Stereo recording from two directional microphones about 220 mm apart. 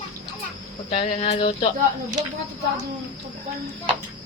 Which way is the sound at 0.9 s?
30° left (ahead or behind).